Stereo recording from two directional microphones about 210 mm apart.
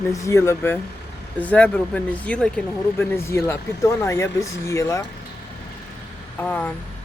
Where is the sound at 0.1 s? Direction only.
15° left (ahead or behind).